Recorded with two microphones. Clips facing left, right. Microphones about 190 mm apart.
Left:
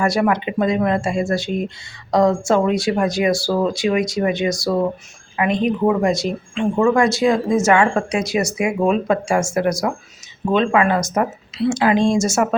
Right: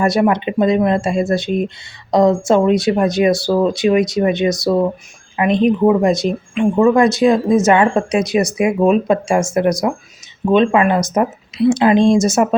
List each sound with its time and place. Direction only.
0.0 s speech: 20° right (ahead or behind)